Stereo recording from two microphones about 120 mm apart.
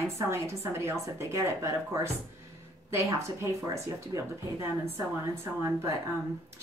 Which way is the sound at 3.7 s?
25° right (ahead or behind).